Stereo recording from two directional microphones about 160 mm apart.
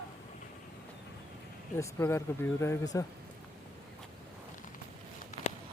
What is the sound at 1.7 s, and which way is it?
Speech, 15° left (ahead or behind).